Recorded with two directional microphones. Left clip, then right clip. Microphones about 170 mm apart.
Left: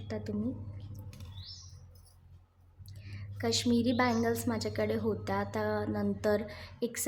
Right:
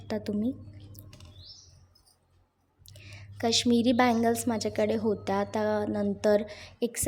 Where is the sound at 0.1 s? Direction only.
40° right (ahead or behind).